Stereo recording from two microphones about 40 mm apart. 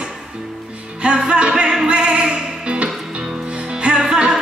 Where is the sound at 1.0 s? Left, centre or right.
Right.